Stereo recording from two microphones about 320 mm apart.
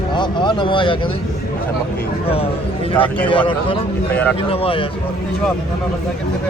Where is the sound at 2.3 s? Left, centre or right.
Centre.